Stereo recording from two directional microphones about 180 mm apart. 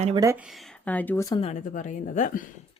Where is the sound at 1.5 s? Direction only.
45° left (ahead or behind).